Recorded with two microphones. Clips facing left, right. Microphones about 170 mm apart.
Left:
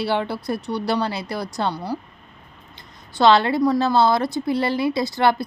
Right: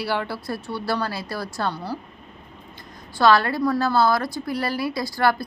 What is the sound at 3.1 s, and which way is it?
Speech, 25° left (ahead or behind).